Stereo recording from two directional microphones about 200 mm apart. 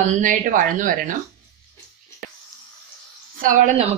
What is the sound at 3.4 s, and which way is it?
Speech, 40° right (ahead or behind).